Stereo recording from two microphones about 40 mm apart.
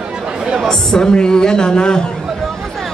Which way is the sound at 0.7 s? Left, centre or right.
Centre.